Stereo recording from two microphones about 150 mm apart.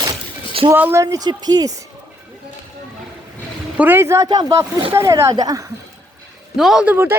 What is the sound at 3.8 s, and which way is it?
Speech, 15° right (ahead or behind).